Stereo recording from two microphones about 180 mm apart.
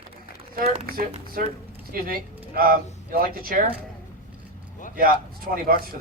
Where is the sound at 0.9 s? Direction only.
55° right (ahead or behind).